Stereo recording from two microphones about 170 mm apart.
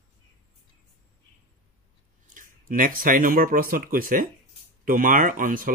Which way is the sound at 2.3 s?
55° right (ahead or behind).